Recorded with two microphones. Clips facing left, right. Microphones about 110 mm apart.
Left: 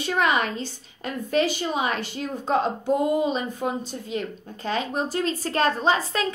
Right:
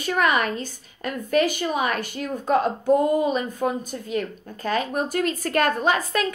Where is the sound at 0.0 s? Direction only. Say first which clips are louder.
Right 1 dB; 25° left (ahead or behind).